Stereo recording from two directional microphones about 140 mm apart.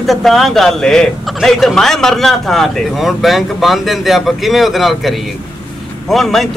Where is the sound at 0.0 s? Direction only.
Centre (ahead or behind).